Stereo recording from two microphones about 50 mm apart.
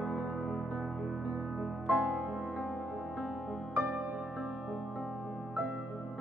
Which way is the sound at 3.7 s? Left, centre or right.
Right.